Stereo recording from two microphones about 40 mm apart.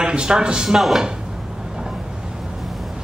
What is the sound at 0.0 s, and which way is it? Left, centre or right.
Speech, right.